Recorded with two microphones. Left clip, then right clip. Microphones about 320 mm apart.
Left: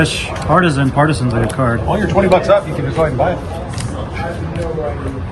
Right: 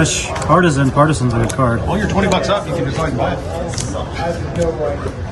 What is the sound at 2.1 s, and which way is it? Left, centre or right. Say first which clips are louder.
Speech: left 5 dB; left.